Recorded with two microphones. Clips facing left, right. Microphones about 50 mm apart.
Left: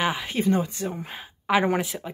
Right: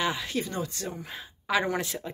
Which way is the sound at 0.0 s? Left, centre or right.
Left.